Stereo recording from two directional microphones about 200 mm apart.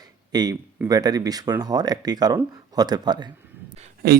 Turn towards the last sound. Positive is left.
turn(degrees=-50)  # may be behind; listen again after turning